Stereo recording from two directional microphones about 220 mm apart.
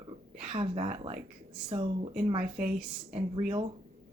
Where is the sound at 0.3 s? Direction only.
25° right (ahead or behind).